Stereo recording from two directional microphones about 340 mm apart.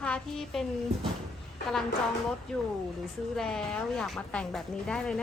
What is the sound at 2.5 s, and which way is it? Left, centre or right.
A woman's voice, centre.